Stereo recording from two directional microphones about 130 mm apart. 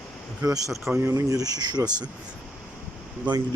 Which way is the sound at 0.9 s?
20° right (ahead or behind).